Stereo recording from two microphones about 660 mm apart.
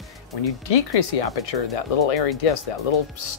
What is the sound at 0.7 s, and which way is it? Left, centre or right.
Speech, left.